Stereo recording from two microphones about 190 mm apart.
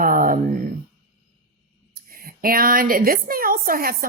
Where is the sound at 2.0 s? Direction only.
50° right (ahead or behind).